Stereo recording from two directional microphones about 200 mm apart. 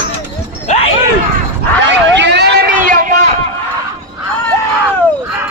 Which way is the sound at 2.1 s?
60° right (ahead or behind).